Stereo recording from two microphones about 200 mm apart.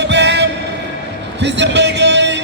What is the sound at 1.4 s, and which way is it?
Speech, 60° right (ahead or behind).